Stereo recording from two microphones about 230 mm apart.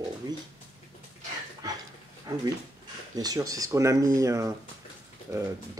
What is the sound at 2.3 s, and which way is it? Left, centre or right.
Speech, centre.